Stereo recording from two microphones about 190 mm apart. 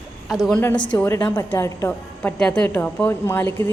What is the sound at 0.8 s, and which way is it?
A woman's voice, 10° left (ahead or behind).